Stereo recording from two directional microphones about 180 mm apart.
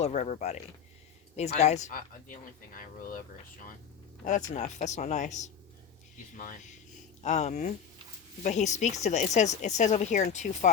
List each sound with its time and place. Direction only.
0.0 s speech: 40° left (ahead or behind)
4.2 s speech: 45° left (ahead or behind)